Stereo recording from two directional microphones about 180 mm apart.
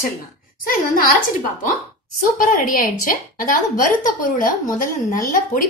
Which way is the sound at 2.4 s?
45° left (ahead or behind).